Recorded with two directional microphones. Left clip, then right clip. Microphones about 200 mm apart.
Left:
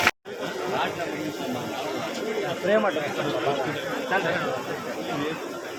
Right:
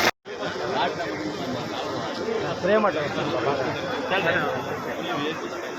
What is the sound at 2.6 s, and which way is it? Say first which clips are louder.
Chatter: right 2 dB; 20° right (ahead or behind).